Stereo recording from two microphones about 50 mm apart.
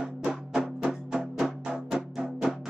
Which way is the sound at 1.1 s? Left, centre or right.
Centre.